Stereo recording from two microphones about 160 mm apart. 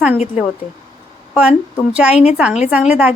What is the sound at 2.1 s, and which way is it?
Speech, 40° left (ahead or behind).